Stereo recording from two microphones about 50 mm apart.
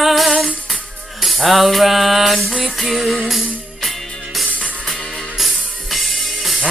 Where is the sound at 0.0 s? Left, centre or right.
Centre.